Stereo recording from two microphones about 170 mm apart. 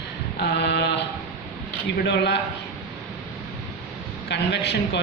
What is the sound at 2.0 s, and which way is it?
Speech, 75° left (ahead or behind).